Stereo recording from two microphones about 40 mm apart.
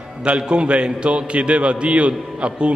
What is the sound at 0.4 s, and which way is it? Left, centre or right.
A man's voice, right.